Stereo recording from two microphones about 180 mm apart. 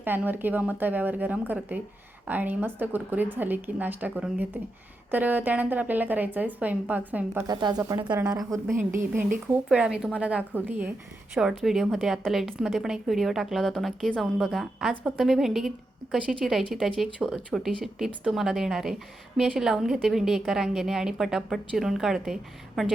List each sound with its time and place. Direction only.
0.0 s a woman's voice: 10° right (ahead or behind)
7.4 s speech: 25° right (ahead or behind)
8.1 s a woman's voice: 5° right (ahead or behind)